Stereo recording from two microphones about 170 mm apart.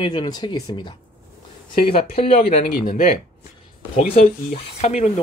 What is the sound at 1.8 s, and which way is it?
Speech, 65° left (ahead or behind).